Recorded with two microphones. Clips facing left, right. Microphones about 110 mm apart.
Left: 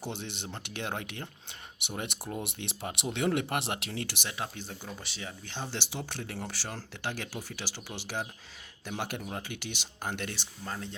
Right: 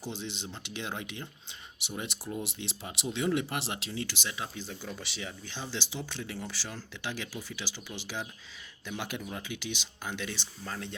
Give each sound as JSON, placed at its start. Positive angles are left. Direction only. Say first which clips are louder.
{"t": 0.0, "sound": "speech", "louder": "even", "side_deg": 60}
{"t": 4.9, "sound": "speech", "louder": "right 1 dB", "side_deg": 40}
{"t": 9.0, "sound": "speech", "louder": "left 2 dB", "side_deg": 55}
{"t": 10.6, "sound": "speech", "louder": "left 2 dB", "side_deg": 30}